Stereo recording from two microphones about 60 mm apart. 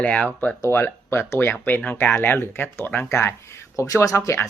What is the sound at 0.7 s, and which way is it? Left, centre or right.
Speech, left.